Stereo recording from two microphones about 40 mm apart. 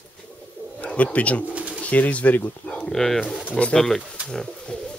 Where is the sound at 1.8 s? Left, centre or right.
Left.